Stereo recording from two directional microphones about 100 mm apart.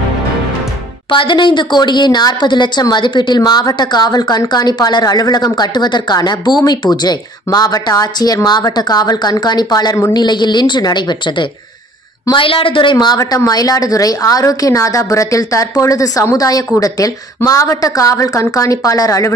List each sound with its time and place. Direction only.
1.1 s speech: 55° left (ahead or behind)
12.3 s a woman's voice: 60° left (ahead or behind); by 19.3 s 35° left (ahead or behind)